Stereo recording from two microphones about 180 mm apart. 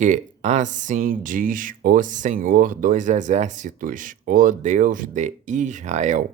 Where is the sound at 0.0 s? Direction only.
40° right (ahead or behind).